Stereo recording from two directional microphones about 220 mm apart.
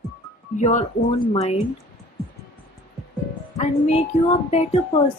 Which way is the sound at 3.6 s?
30° left (ahead or behind).